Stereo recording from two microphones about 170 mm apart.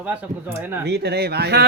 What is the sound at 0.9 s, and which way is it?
Speech, 75° right (ahead or behind).